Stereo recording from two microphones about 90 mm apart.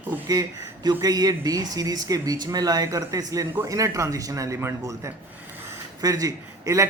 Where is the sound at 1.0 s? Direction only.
45° right (ahead or behind).